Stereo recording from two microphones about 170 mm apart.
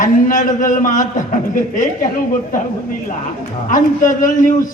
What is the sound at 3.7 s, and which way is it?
A man's voice, 50° left (ahead or behind).